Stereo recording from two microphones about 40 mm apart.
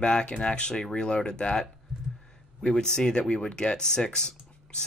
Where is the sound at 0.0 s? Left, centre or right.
Left.